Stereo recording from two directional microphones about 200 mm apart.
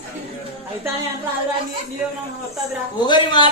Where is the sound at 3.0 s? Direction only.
20° left (ahead or behind).